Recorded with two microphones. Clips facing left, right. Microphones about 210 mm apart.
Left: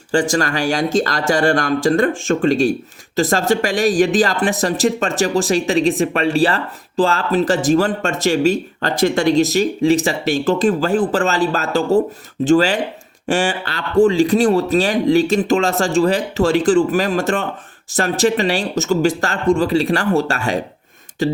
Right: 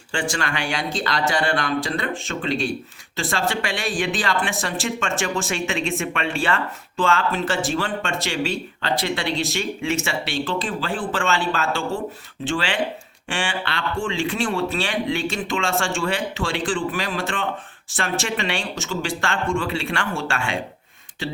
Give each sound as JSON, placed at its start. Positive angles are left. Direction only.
{"t": 0.1, "sound": "speech", "side_deg": 40}